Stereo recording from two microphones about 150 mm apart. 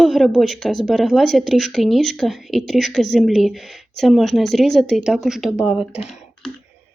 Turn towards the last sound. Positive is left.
turn(degrees=-5)  # may be behind; listen again after turning